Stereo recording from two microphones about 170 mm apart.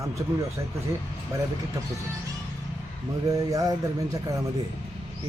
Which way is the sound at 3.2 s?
20° right (ahead or behind).